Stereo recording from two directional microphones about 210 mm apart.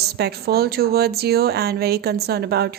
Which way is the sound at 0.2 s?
50° right (ahead or behind).